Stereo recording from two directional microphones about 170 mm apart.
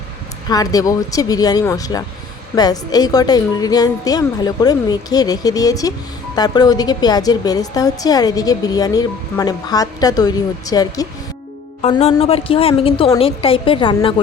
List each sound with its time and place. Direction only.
0.4 s a woman's voice: 20° left (ahead or behind)
11.8 s a woman's voice: 40° left (ahead or behind)